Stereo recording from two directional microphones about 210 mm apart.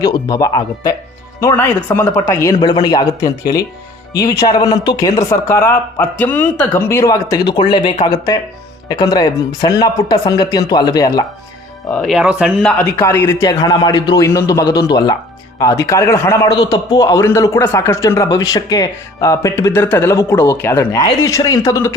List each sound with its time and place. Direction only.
0.0 s a man's voice: 20° left (ahead or behind)
11.9 s speech: centre (ahead or behind)
12.8 s a man's voice: 10° left (ahead or behind)